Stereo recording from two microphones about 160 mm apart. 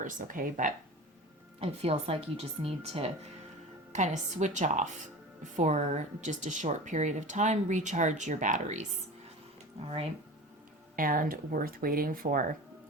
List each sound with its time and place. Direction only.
0.0 s speech: 55° right (ahead or behind)
1.5 s speech: 40° right (ahead or behind)
3.9 s speech: 50° right (ahead or behind)
10.9 s speech: 60° right (ahead or behind)